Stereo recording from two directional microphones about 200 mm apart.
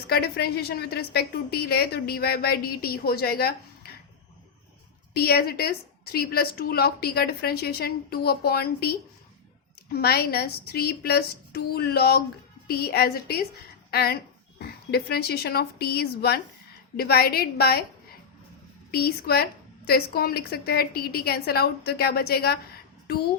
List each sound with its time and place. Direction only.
0.1 s a woman's voice: 50° left (ahead or behind)
5.1 s a woman's voice: 50° left (ahead or behind)
18.9 s a woman's voice: 50° left (ahead or behind)